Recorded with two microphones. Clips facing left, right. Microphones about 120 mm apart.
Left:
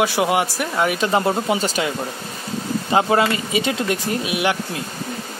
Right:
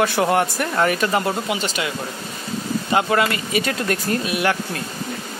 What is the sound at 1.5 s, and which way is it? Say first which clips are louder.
Speech: left 3 dB; 40° left (ahead or behind).